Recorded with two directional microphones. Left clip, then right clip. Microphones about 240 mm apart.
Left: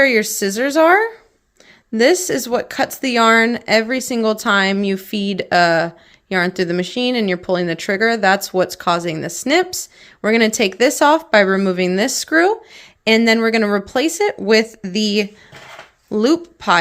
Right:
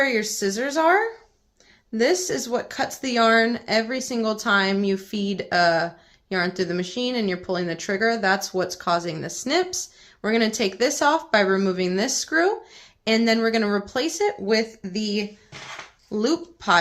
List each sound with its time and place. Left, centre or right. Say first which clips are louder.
0.0 s speech: left 8 dB; left